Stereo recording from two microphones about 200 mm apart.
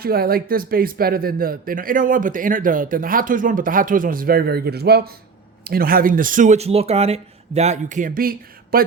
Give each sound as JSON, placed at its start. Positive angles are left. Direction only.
{"t": 0.0, "sound": "speech", "side_deg": -50}